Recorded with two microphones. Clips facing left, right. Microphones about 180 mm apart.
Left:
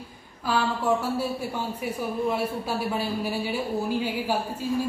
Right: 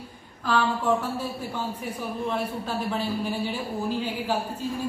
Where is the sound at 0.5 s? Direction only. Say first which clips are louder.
Right 1 dB; 10° left (ahead or behind).